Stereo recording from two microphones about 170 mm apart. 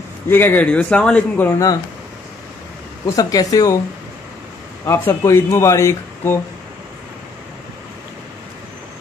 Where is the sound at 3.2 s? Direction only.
20° left (ahead or behind).